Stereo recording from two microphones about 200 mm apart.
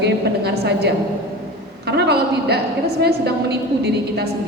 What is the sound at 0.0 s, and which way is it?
A woman's voice, 55° right (ahead or behind).